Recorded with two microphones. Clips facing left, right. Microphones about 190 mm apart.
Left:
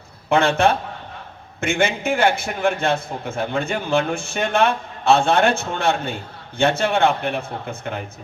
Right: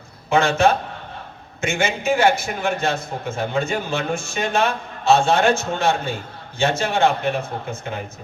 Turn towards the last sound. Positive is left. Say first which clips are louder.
# even
turn(degrees=60)  # may be behind; listen again after turning